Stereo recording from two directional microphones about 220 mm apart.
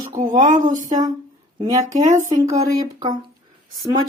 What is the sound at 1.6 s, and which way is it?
A woman's voice, 15° right (ahead or behind).